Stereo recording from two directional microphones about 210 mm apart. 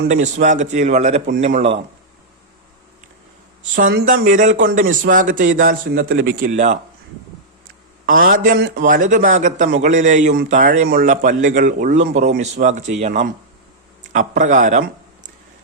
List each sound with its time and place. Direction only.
0.0 s a man's voice: 35° right (ahead or behind)
3.9 s a man's voice: 40° right (ahead or behind)
6.1 s speech: 65° right (ahead or behind)
6.4 s a man's voice: 35° right (ahead or behind)
8.0 s a man's voice: 40° right (ahead or behind)